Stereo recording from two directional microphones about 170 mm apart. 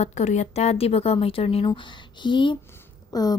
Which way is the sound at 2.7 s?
20° left (ahead or behind).